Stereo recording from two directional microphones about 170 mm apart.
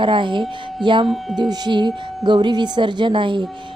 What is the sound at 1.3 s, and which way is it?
A woman's voice, 25° right (ahead or behind).